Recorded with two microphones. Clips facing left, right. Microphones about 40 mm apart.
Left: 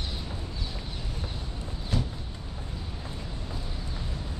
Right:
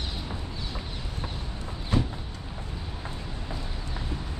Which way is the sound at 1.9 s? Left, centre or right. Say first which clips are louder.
Right 4 dB; right.